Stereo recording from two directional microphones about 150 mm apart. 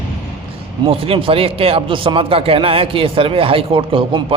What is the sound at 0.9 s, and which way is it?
Speech, 40° right (ahead or behind).